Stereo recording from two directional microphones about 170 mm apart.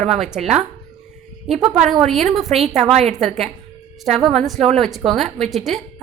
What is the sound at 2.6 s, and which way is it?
Speech, 40° right (ahead or behind).